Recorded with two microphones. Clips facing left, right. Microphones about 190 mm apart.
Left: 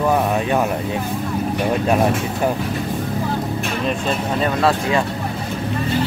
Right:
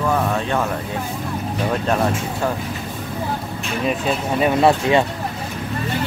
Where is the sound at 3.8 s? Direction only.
5° right (ahead or behind).